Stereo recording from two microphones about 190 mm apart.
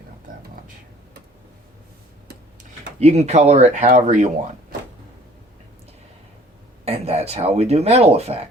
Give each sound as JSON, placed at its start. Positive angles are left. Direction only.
{"t": 3.0, "sound": "speech", "side_deg": -35}
{"t": 6.8, "sound": "speech", "side_deg": -30}